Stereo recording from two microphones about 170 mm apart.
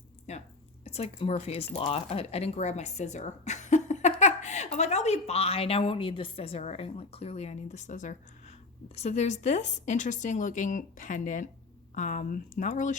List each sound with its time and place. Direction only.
0.9 s a woman's voice: 35° left (ahead or behind)